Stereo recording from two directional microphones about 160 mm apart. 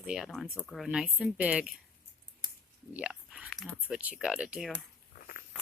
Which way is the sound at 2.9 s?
5° right (ahead or behind).